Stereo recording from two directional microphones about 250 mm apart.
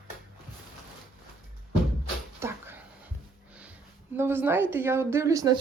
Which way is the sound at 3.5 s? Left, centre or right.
Centre.